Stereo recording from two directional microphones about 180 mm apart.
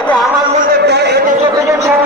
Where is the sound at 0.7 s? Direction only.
65° right (ahead or behind).